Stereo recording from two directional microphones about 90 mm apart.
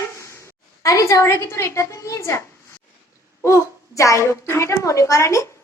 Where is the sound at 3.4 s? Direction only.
35° left (ahead or behind).